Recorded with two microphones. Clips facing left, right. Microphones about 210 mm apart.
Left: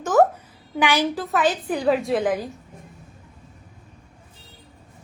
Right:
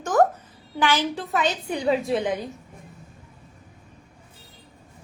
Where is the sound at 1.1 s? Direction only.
Centre (ahead or behind).